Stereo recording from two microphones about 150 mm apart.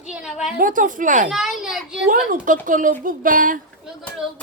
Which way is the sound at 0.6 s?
65° right (ahead or behind).